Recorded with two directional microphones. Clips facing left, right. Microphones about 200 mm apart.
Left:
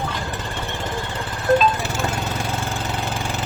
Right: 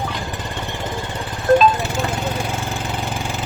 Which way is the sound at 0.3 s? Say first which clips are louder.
Right 1 dB; 15° right (ahead or behind).